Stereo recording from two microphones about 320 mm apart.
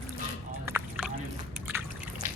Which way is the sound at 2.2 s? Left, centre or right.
Centre.